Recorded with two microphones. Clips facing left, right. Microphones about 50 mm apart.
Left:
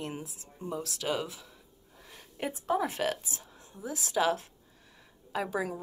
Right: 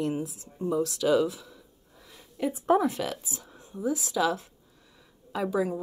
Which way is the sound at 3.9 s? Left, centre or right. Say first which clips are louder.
Right 2 dB; left.